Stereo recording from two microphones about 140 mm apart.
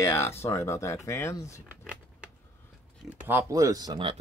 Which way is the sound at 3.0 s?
10° right (ahead or behind).